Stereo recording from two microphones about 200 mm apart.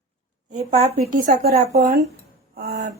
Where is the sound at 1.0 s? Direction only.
40° right (ahead or behind).